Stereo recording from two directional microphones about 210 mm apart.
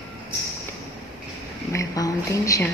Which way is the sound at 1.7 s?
15° left (ahead or behind).